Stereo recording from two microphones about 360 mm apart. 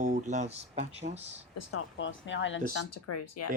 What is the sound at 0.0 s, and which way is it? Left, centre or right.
Speech, right.